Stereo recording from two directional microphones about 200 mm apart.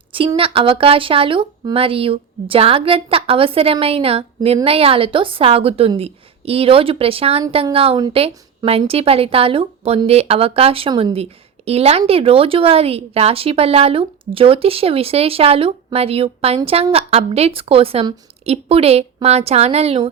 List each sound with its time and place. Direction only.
0.1 s a woman's voice: 25° right (ahead or behind)